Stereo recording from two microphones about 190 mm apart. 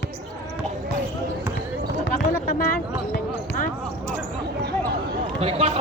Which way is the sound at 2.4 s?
50° left (ahead or behind).